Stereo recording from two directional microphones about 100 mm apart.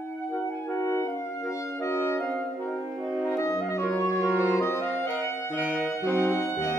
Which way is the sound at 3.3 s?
30° left (ahead or behind).